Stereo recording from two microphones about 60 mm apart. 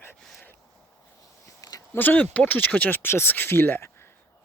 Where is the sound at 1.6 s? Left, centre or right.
Left.